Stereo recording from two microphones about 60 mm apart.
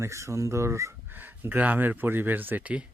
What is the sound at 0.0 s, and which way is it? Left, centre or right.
Speech, right.